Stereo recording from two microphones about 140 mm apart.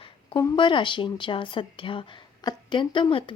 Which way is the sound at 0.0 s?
35° left (ahead or behind).